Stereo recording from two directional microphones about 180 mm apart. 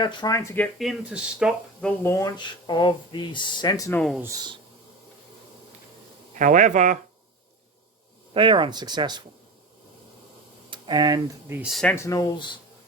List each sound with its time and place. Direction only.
0.0 s speech: 20° left (ahead or behind)
0.5 s speech: 5° left (ahead or behind)
2.1 s speech: 25° left (ahead or behind)
6.4 s speech: 45° right (ahead or behind)
8.3 s speech: 30° right (ahead or behind)
10.7 s a sound: 25° right (ahead or behind)
11.4 s speech: 10° right (ahead or behind)
11.7 s speech: 5° left (ahead or behind)
11.9 s speech: 20° left (ahead or behind)